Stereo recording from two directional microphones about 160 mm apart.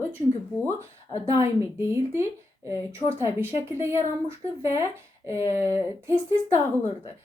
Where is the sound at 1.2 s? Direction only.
15° right (ahead or behind).